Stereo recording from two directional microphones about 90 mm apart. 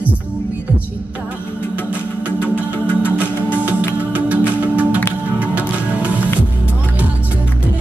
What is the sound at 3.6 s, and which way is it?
Music, 15° right (ahead or behind).